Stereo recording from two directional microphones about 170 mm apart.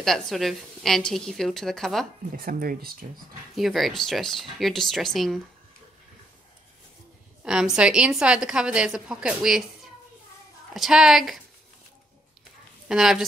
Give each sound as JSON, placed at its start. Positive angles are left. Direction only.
{"t": 0.0, "sound": "a woman's voice", "side_deg": 0}
{"t": 2.3, "sound": "speech", "side_deg": -60}
{"t": 3.5, "sound": "a woman's voice", "side_deg": 0}
{"t": 7.4, "sound": "a woman's voice", "side_deg": -5}
{"t": 10.7, "sound": "a woman's voice", "side_deg": 0}
{"t": 12.8, "sound": "a woman's voice", "side_deg": -5}